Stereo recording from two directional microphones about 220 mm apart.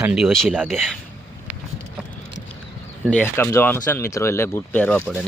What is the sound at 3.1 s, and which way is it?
Speech, 10° left (ahead or behind).